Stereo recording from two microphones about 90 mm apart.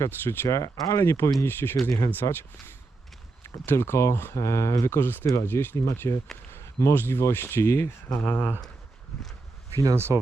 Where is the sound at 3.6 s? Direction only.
25° left (ahead or behind).